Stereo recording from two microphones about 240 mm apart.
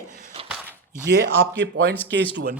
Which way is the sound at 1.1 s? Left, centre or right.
Right.